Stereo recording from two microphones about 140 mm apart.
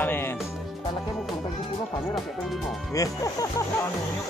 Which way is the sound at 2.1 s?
Centre (ahead or behind).